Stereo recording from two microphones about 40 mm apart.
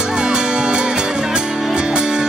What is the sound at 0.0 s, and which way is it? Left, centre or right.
Music, centre.